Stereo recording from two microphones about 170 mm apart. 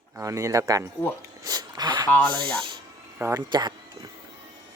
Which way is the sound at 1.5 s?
25° right (ahead or behind).